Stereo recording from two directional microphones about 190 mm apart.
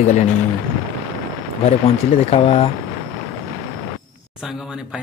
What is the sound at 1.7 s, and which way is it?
Speech, 35° left (ahead or behind).